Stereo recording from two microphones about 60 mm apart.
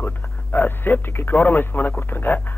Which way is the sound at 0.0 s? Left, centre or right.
Left.